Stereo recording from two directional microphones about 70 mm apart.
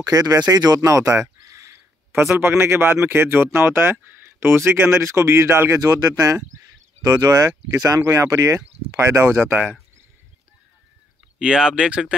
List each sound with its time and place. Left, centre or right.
0.0 s speech: right
0.5 s speech: right
0.7 s speech: right
5.8 s speech: right
8.0 s speech: right
9.4 s speech: right
11.3 s speech: centre